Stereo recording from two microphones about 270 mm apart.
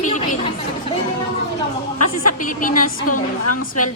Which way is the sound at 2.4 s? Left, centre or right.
Left.